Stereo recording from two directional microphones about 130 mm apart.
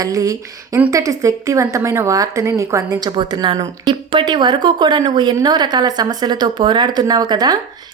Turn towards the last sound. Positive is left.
turn(degrees=-30)  # may be behind; listen again after turning